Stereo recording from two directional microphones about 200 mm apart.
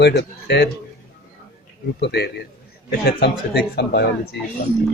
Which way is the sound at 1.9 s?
55° left (ahead or behind).